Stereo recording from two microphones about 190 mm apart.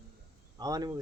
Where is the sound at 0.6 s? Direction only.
20° right (ahead or behind).